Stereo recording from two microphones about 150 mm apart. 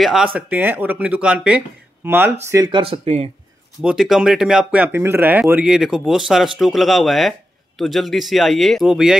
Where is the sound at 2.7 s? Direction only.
40° right (ahead or behind).